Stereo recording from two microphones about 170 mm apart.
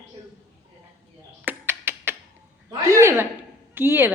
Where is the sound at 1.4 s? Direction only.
10° right (ahead or behind).